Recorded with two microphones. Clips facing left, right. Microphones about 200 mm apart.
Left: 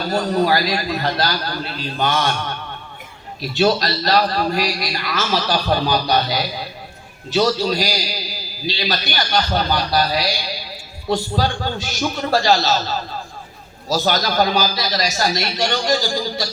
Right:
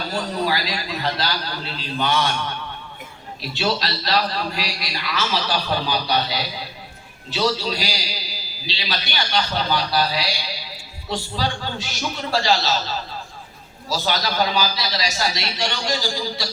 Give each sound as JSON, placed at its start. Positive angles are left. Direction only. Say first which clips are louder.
{"t": 0.1, "sound": "a man's voice", "louder": "left 7 dB", "side_deg": 45}
{"t": 3.5, "sound": "a man's voice", "louder": "left 7 dB", "side_deg": 45}